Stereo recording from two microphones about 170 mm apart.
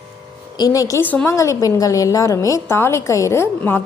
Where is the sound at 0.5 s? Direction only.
20° left (ahead or behind).